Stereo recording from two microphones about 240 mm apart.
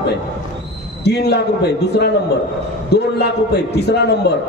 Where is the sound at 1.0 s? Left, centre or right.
Left.